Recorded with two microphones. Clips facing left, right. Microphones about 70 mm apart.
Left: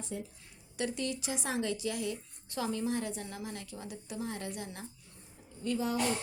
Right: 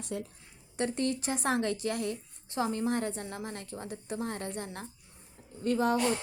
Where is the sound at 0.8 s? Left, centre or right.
Right.